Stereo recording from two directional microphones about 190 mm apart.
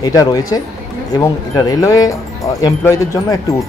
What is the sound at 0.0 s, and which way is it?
Speech, 20° left (ahead or behind).